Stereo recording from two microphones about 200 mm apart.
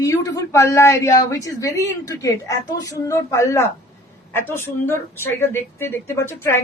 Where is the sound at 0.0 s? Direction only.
15° left (ahead or behind).